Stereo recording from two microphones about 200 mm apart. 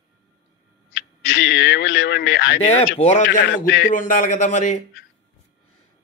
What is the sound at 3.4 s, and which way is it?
Speech, 60° left (ahead or behind).